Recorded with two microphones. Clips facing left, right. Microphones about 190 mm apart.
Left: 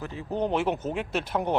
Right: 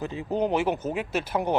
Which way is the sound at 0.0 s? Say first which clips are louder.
Right 3 dB; 20° right (ahead or behind).